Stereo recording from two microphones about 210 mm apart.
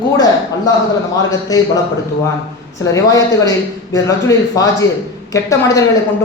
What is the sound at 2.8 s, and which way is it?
A man's voice, 15° left (ahead or behind).